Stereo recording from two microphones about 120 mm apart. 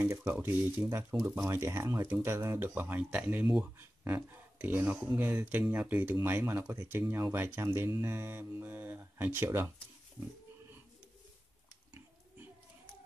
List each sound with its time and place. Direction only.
0.0 s speech: 20° right (ahead or behind)